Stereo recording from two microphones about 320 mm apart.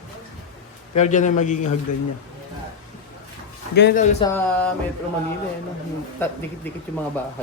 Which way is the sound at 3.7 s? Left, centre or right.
Left.